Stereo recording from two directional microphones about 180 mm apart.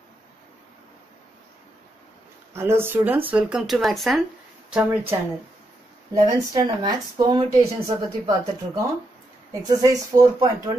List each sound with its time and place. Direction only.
2.5 s speech: 15° right (ahead or behind)
6.1 s speech: 20° right (ahead or behind)